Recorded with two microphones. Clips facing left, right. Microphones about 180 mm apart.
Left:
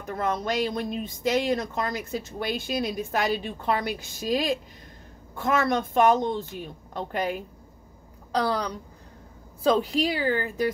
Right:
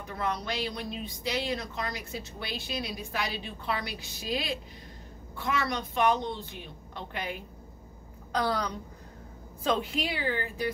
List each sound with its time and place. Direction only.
0.0 s a woman's voice: 45° left (ahead or behind)